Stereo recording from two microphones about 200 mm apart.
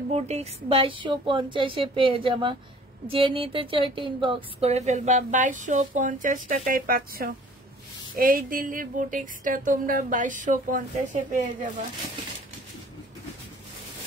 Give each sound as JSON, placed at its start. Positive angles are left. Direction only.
{"t": 0.1, "sound": "a woman's voice", "side_deg": -30}